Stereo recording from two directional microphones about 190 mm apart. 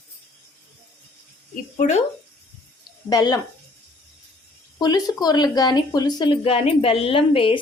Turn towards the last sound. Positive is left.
turn(degrees=30)  # may be behind; listen again after turning